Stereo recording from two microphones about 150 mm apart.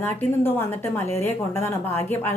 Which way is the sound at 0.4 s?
15° left (ahead or behind).